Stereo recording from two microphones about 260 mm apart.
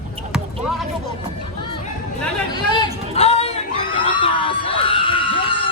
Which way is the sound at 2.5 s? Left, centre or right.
Centre.